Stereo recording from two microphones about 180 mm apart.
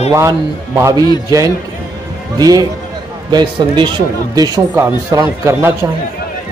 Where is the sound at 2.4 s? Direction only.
20° right (ahead or behind).